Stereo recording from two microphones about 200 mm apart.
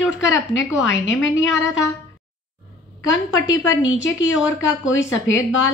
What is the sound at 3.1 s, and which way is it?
Speech, 70° left (ahead or behind).